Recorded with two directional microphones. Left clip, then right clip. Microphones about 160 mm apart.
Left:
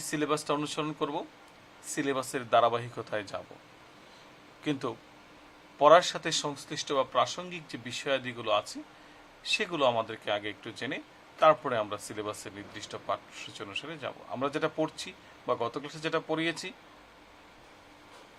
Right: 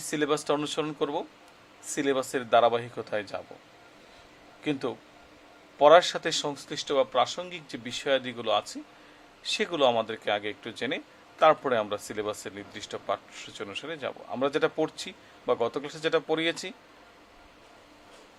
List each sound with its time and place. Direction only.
0.0 s speech: 25° right (ahead or behind)
4.6 s speech: 15° right (ahead or behind)